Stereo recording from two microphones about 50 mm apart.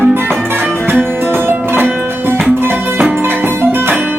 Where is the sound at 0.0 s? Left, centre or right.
Right.